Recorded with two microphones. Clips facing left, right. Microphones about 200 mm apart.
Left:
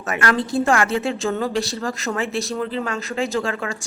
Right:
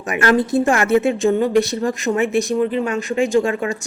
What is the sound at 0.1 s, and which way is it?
A woman's voice, 25° right (ahead or behind).